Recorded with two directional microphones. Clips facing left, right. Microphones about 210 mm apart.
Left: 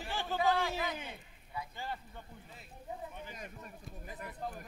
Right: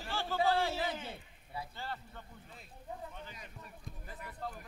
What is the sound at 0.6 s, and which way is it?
Speech, 30° right (ahead or behind).